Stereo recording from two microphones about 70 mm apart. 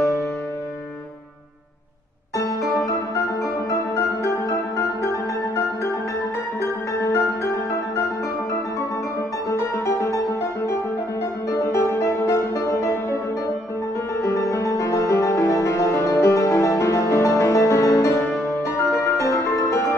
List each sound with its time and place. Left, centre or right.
3.7 s music: left
7.1 s music: left
9.5 s music: left
14.2 s music: left